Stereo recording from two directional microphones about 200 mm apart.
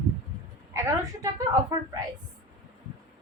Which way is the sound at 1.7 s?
20° right (ahead or behind).